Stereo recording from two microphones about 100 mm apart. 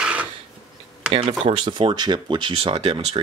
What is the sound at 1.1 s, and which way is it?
Speech, 60° right (ahead or behind).